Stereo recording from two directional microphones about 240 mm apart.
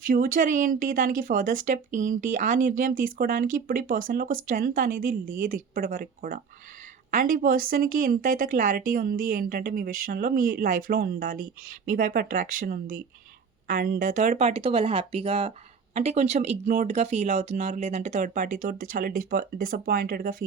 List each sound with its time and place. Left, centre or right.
0.0 s speech: right